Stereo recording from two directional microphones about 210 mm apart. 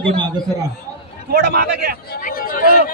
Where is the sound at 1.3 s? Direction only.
50° right (ahead or behind).